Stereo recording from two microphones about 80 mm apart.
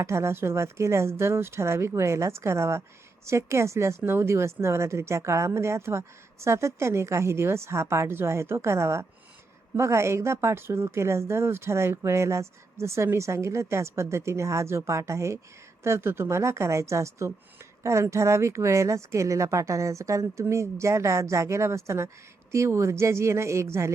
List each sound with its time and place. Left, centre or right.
0.0 s a woman's voice: right